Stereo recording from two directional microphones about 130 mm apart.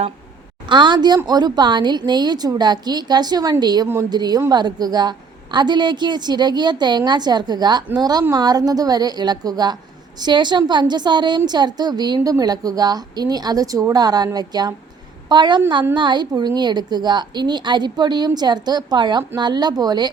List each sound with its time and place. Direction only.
0.7 s a woman's voice: 35° right (ahead or behind)